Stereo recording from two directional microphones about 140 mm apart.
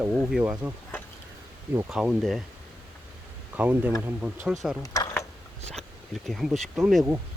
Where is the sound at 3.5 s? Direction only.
10° right (ahead or behind).